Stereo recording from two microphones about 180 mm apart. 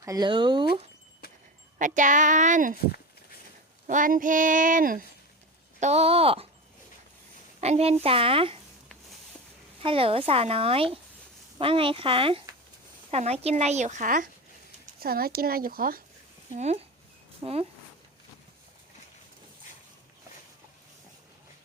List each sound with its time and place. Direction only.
0.0 s speech: 20° right (ahead or behind)
1.2 s a sound: 60° left (ahead or behind)
2.0 s speech: 45° right (ahead or behind)
3.8 s speech: 45° right (ahead or behind)
5.8 s speech: 35° right (ahead or behind)
7.6 s speech: 35° right (ahead or behind)
9.8 s speech: 30° right (ahead or behind); by 14.3 s 45° right (ahead or behind)
14.9 s speech: 55° right (ahead or behind)
16.5 s speech: 40° right (ahead or behind)